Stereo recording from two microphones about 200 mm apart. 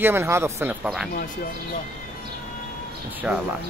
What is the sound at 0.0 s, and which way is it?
Speech, 10° right (ahead or behind).